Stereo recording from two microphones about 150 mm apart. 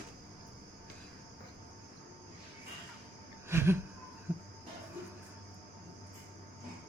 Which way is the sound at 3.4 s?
15° right (ahead or behind).